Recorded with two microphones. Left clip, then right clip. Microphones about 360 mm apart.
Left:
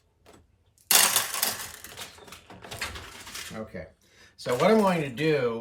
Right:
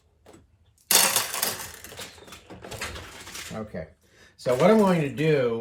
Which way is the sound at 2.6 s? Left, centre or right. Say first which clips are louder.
Right 1 dB; centre.